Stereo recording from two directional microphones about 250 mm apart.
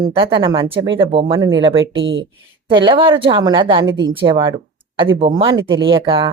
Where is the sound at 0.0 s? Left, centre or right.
Centre.